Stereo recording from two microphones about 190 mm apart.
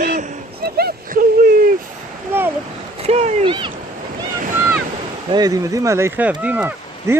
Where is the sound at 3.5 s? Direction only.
25° right (ahead or behind).